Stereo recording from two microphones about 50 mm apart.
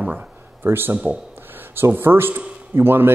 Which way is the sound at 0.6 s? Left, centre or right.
Right.